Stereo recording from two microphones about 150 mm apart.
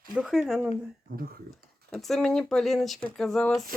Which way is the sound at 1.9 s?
Centre (ahead or behind).